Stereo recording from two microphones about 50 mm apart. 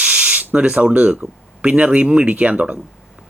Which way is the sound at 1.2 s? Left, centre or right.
Right.